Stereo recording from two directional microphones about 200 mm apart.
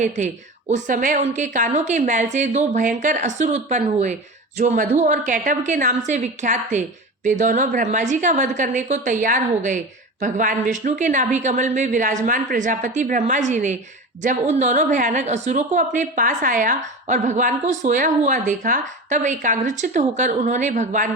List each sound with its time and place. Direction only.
0.7 s a woman's voice: 40° right (ahead or behind)